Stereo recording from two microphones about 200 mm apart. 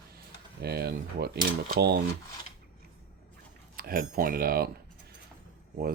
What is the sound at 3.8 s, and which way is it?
Speech, 50° right (ahead or behind).